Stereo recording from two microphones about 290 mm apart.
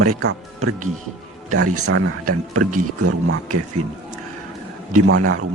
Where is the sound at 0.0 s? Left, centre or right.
Right.